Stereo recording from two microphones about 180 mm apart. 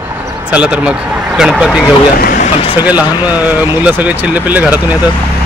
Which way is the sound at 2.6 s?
30° left (ahead or behind).